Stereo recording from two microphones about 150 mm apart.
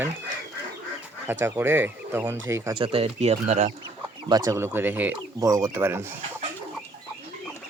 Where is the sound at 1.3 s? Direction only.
15° right (ahead or behind).